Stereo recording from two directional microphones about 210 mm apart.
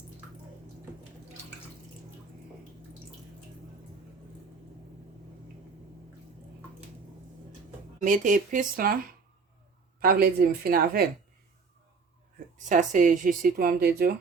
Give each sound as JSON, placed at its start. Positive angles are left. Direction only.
{"t": 8.0, "sound": "speech", "side_deg": -40}
{"t": 10.0, "sound": "speech", "side_deg": -45}
{"t": 12.6, "sound": "speech", "side_deg": -35}